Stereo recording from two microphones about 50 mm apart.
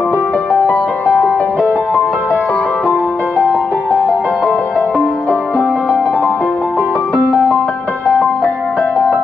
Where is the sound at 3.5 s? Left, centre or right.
Left.